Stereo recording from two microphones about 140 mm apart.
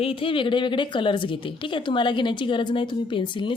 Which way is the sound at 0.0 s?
40° left (ahead or behind).